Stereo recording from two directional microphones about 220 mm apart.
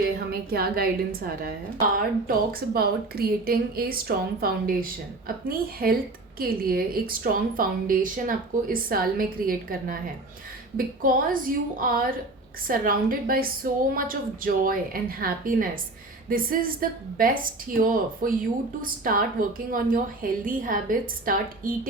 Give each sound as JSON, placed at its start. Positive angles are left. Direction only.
{"t": 0.3, "sound": "a woman's voice", "side_deg": -45}